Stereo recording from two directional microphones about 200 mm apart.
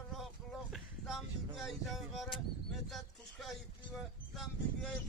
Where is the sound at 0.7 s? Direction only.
Centre (ahead or behind).